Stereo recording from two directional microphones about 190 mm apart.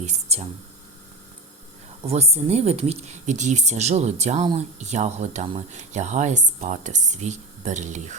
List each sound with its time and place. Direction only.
0.0 s speech: 35° right (ahead or behind)
2.0 s speech: 35° right (ahead or behind)